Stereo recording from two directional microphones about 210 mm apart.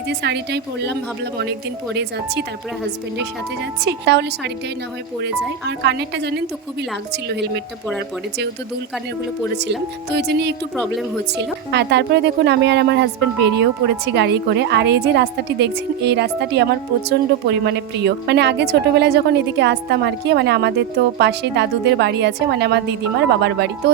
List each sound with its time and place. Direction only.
0.1 s a woman's voice: 55° right (ahead or behind)
3.8 s a woman's voice: 55° right (ahead or behind)
9.6 s a woman's voice: 55° right (ahead or behind)